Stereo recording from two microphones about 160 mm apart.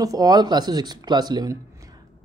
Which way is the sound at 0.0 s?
20° right (ahead or behind).